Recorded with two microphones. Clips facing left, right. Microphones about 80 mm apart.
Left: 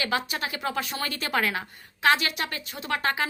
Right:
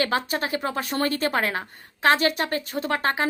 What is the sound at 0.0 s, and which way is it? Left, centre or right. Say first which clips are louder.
A woman's voice: right 4 dB; right.